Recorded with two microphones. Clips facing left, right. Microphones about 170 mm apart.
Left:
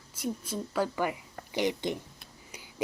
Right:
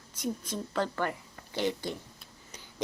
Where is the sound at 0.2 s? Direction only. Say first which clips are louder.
Even; 5° left (ahead or behind).